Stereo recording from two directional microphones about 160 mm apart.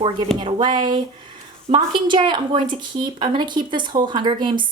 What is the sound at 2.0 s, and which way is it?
Speech, 30° right (ahead or behind).